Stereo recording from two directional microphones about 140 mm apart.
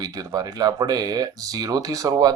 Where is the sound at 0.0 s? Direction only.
25° right (ahead or behind).